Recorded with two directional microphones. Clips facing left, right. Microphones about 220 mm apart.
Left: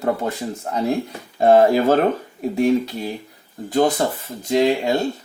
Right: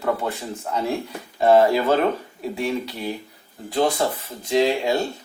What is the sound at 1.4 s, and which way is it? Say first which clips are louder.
Speech: left 2 dB; 45° left (ahead or behind).